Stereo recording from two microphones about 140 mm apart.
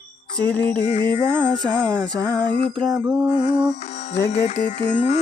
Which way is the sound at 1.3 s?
5° left (ahead or behind).